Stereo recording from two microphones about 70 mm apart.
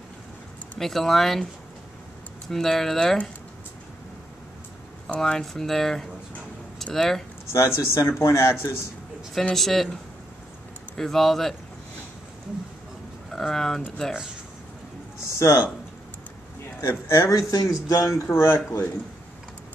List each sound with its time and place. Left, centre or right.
0.7 s speech: centre
2.5 s speech: centre
5.1 s speech: centre
7.5 s speech: left
9.3 s speech: centre
11.0 s speech: centre
13.3 s speech: centre
15.2 s a sound: left
17.1 s speech: left